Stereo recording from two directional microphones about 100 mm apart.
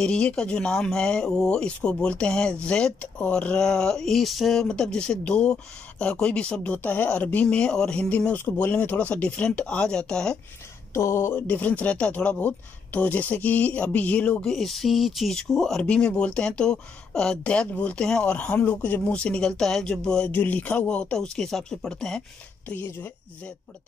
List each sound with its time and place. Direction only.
0.0 s speech: 10° left (ahead or behind)
10.9 s speech: 30° left (ahead or behind); by 22.2 s 5° left (ahead or behind)
22.7 s speech: 20° left (ahead or behind)